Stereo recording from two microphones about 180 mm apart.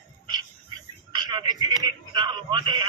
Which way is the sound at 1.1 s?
25° right (ahead or behind).